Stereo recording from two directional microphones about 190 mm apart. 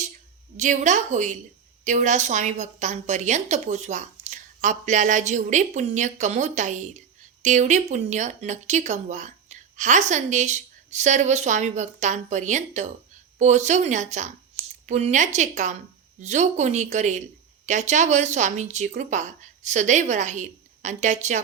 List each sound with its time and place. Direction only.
0.5 s speech: 40° right (ahead or behind)